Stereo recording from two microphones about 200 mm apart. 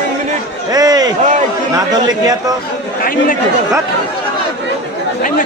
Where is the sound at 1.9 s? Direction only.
20° right (ahead or behind).